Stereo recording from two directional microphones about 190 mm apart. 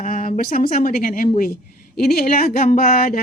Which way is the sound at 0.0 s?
45° left (ahead or behind).